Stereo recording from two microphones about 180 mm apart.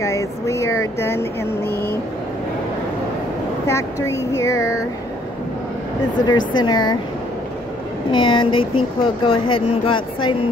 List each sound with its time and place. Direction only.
0.0 s speech: 15° left (ahead or behind)
3.6 s speech: 15° left (ahead or behind)
6.2 s speech: 25° left (ahead or behind)
8.1 s speech: 25° left (ahead or behind)